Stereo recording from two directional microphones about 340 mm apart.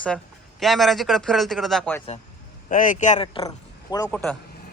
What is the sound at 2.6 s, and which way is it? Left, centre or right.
A child's voice, left.